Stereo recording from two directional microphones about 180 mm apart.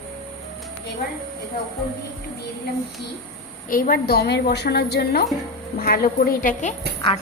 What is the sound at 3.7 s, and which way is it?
A woman's voice, 55° left (ahead or behind).